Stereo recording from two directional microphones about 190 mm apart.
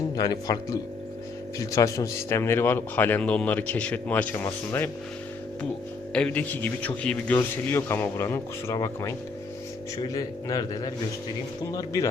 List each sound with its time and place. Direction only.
0.2 s speech: 20° left (ahead or behind)
6.1 s speech: 5° left (ahead or behind)